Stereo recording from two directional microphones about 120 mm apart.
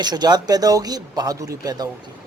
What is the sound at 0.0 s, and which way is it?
A man's voice, 35° right (ahead or behind).